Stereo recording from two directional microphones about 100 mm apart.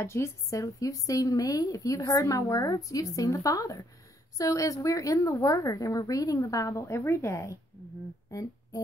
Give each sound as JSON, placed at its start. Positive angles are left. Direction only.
{"t": 0.0, "sound": "speech", "side_deg": 25}